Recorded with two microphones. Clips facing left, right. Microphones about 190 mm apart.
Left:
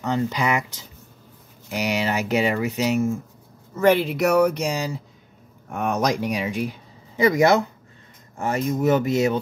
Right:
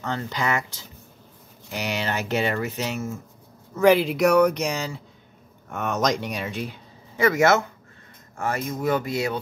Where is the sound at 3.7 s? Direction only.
Centre (ahead or behind).